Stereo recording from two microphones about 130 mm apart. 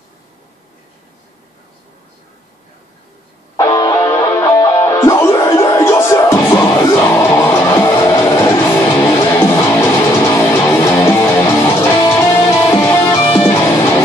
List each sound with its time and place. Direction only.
3.5 s music: 25° left (ahead or behind)